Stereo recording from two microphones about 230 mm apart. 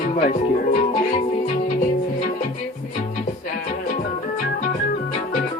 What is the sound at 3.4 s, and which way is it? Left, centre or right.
Organ, left.